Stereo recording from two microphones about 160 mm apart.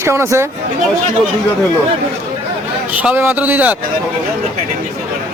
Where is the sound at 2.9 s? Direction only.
10° right (ahead or behind).